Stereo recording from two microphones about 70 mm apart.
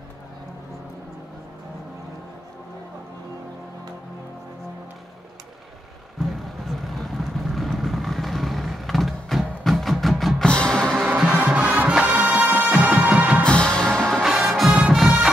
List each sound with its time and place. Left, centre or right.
6.6 s vehicle: centre
9.6 s music: centre
10.5 s music: centre
11.1 s music: centre
13.4 s music: centre
14.2 s music: centre